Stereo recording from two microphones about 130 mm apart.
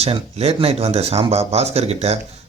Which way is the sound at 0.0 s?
50° right (ahead or behind).